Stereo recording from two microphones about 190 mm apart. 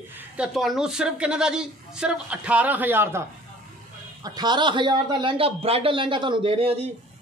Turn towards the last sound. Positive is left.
turn(degrees=-30)  # may be behind; listen again after turning